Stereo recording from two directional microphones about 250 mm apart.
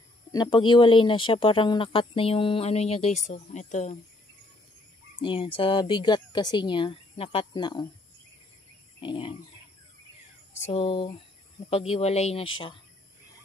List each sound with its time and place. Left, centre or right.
0.3 s speech: centre
5.2 s speech: left
9.0 s speech: centre
10.7 s speech: left